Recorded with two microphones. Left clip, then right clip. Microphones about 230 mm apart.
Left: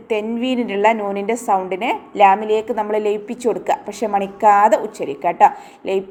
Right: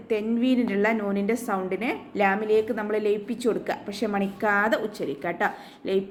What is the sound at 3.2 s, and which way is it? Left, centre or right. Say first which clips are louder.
Speech: left 7 dB; centre.